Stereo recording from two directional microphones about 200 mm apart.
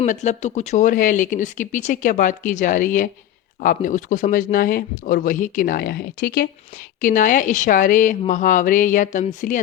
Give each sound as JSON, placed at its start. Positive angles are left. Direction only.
{"t": 0.0, "sound": "speech", "side_deg": 35}